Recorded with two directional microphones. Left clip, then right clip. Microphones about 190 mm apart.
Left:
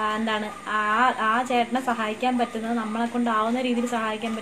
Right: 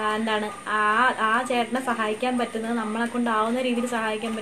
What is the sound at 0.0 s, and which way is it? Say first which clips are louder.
A woman's voice: right 1 dB; 15° right (ahead or behind).